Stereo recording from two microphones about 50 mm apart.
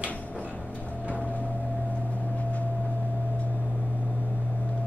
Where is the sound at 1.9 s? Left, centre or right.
Left.